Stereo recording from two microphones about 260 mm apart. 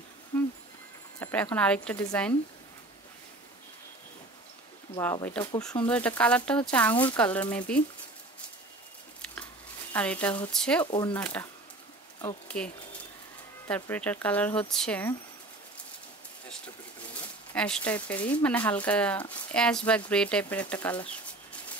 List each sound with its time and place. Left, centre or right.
0.3 s a sound: centre
1.2 s speech: centre
4.9 s speech: centre
9.2 s a sound: centre
9.9 s speech: centre
10.9 s speech: centre
11.1 s speech: centre
12.5 s speech: centre
16.4 s speech: centre
20.7 s bird: centre